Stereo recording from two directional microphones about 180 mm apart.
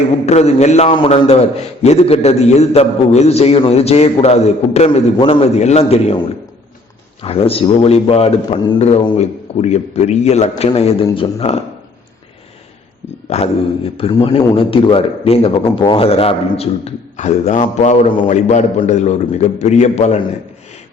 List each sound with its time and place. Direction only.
0.3 s a man's voice: 40° left (ahead or behind)
7.2 s a man's voice: 35° left (ahead or behind)
9.1 s a man's voice: 40° left (ahead or behind)
13.3 s a man's voice: 35° left (ahead or behind)